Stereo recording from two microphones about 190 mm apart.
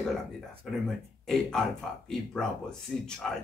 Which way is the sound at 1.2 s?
Centre (ahead or behind).